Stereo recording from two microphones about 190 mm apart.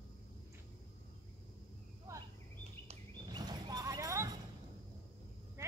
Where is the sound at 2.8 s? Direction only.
20° right (ahead or behind).